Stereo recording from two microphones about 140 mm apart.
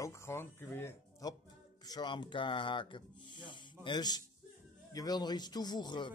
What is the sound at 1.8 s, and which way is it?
Speech, 30° left (ahead or behind).